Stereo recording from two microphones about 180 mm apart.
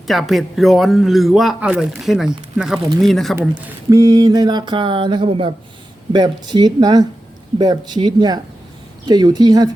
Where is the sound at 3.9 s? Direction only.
20° right (ahead or behind).